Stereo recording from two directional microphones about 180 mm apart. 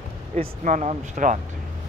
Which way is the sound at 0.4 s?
45° right (ahead or behind).